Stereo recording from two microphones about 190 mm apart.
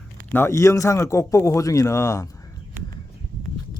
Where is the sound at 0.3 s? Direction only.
10° left (ahead or behind).